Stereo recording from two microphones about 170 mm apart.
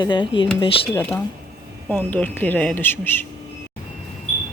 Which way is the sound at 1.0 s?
10° left (ahead or behind).